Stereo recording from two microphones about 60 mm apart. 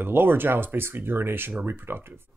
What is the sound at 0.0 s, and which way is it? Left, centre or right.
Speech, right.